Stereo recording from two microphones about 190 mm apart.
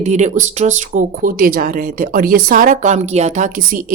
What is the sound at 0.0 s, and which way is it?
Speech, 40° right (ahead or behind).